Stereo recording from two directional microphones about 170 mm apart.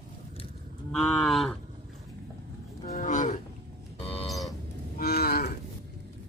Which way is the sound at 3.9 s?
35° left (ahead or behind).